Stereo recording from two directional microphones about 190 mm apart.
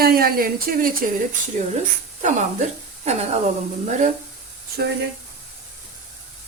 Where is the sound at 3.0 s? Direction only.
35° right (ahead or behind).